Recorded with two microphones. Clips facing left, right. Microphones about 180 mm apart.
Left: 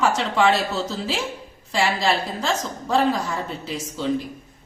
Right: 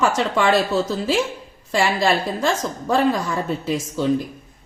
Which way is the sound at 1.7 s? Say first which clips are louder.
Right 3 dB; 55° right (ahead or behind).